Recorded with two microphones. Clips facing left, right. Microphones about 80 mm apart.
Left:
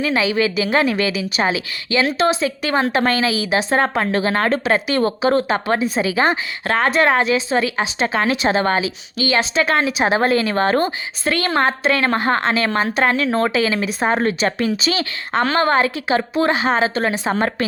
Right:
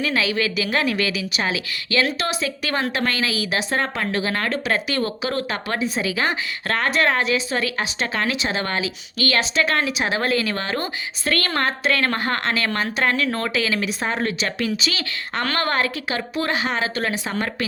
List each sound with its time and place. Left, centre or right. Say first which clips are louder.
0.0 s a woman's voice: left 4 dB; left
8.3 s speech: left 6 dB; left
8.5 s a woman's voice: left 7 dB; left
11.3 s a woman's voice: left 4 dB; centre